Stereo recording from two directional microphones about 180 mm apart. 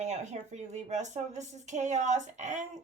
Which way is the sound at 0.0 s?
40° right (ahead or behind).